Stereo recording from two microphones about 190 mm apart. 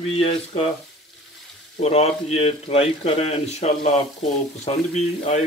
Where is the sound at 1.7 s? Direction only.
35° left (ahead or behind).